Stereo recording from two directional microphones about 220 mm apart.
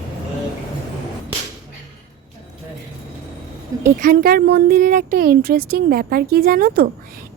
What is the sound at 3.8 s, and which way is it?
Speech, 40° right (ahead or behind).